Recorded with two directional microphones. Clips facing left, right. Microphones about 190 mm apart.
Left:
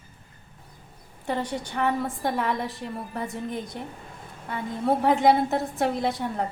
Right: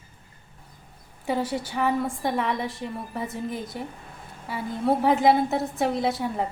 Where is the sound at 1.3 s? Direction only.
5° right (ahead or behind).